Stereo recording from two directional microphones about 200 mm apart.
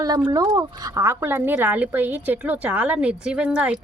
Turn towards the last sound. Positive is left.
turn(degrees=-5)  # may be behind; listen again after turning